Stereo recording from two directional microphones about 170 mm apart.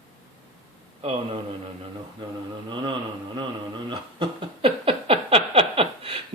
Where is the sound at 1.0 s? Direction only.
35° right (ahead or behind).